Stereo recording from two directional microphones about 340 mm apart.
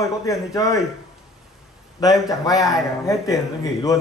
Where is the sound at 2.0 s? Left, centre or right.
Centre.